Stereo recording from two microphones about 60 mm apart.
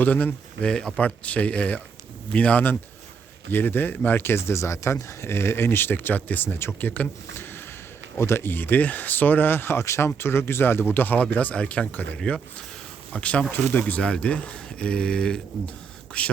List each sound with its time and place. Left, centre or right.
0.0 s speech: left
0.6 s speech: centre
1.0 s speech: left
3.5 s speech: left
8.1 s speech: left
9.8 s speech: left
10.2 s speech: left; by 16.3 s centre